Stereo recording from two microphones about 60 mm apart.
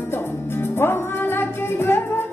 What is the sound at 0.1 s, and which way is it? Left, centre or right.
Music, left.